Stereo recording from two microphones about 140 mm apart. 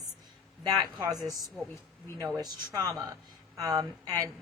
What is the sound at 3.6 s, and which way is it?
Speech, 25° right (ahead or behind).